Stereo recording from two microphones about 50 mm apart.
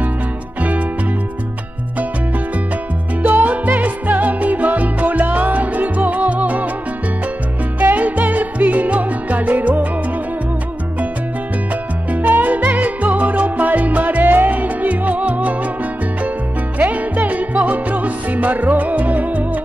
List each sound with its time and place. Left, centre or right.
0.6 s music: right
3.2 s music: right
7.8 s music: right
12.1 s music: right